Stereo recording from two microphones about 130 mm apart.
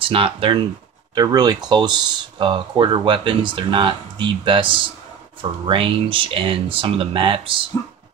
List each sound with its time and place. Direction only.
0.0 s speech: 45° right (ahead or behind)
1.1 s speech: 30° right (ahead or behind)